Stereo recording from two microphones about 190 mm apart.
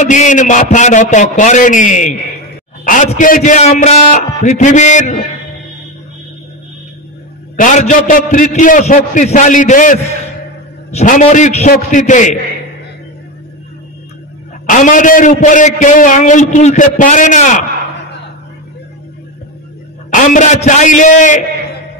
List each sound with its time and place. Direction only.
0.0 s a man's voice: 40° left (ahead or behind)
7.5 s a man's voice: 40° left (ahead or behind)
14.7 s a man's voice: 45° left (ahead or behind)
20.1 s a man's voice: 45° left (ahead or behind)